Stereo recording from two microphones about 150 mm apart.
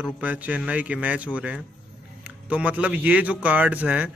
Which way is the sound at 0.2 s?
10° right (ahead or behind).